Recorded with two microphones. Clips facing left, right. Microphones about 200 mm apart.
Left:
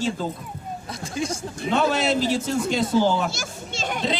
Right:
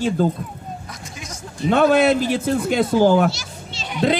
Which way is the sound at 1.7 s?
55° right (ahead or behind).